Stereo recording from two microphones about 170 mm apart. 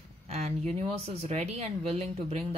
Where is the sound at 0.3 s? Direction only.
40° right (ahead or behind).